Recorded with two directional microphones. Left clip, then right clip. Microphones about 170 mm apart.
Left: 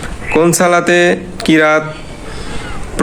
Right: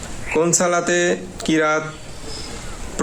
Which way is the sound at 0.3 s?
20° left (ahead or behind).